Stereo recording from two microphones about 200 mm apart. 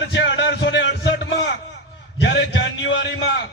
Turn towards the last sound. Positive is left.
turn(degrees=60)  # may be behind; listen again after turning